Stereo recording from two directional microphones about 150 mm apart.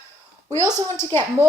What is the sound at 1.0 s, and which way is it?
Speech, 15° left (ahead or behind).